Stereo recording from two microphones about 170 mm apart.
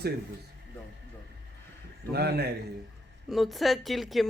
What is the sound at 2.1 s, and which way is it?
Speech, 70° right (ahead or behind).